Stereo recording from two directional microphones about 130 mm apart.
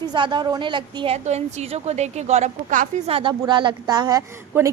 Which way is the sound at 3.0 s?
45° right (ahead or behind).